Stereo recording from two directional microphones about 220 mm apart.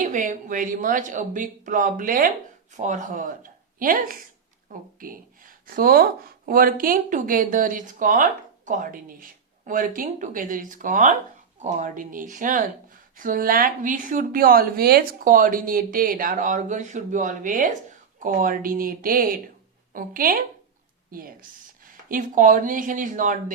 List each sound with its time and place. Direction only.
0.0 s speech: 35° right (ahead or behind)